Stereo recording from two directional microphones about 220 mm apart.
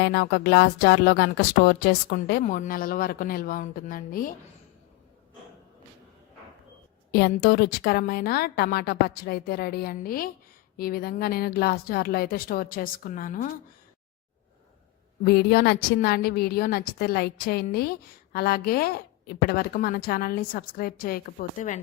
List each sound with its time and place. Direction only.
0.0 s speech: 45° left (ahead or behind)
7.1 s speech: 45° left (ahead or behind)
15.2 s speech: 45° left (ahead or behind)